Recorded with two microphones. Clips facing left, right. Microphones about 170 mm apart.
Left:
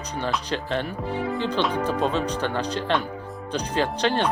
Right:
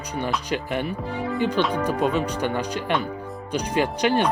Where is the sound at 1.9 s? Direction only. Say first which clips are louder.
Right 1 dB; 10° right (ahead or behind).